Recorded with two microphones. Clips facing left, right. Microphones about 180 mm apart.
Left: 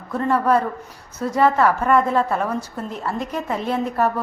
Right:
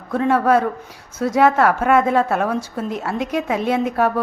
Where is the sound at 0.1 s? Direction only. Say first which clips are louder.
Right 3 dB; 85° right.